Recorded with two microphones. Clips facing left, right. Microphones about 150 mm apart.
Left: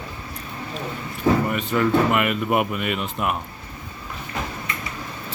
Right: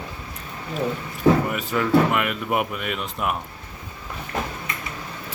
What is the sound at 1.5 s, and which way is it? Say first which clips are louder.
Speech: even; 5° right (ahead or behind).